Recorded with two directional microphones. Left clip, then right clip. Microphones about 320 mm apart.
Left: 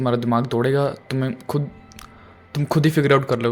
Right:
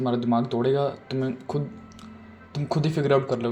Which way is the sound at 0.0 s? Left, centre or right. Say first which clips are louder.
Left 4 dB; left.